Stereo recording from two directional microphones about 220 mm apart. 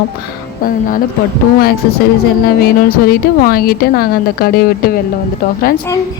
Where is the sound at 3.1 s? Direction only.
45° left (ahead or behind).